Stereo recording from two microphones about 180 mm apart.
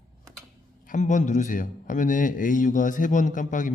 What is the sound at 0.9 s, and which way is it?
Speech, 45° left (ahead or behind).